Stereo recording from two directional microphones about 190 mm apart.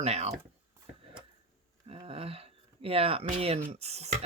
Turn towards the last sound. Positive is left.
turn(degrees=-35)  # may be behind; listen again after turning